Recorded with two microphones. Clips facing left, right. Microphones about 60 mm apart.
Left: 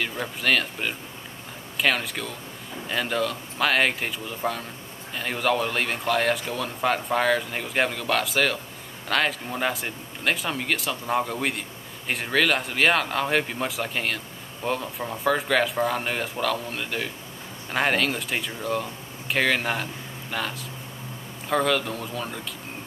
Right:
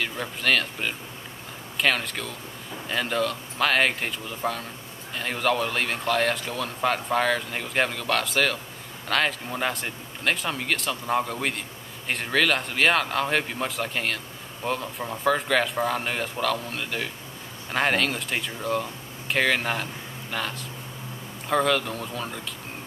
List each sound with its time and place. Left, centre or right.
0.0 s speech: centre